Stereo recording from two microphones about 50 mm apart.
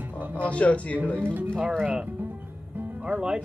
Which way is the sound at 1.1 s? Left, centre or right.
Right.